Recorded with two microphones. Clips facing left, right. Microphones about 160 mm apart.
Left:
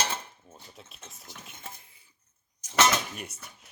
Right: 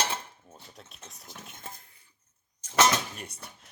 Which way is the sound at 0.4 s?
Centre (ahead or behind).